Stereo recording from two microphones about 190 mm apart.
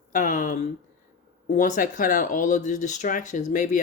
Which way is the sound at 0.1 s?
45° left (ahead or behind).